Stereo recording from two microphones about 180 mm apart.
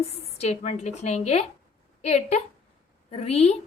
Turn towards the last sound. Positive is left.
turn(degrees=35)  # may be behind; listen again after turning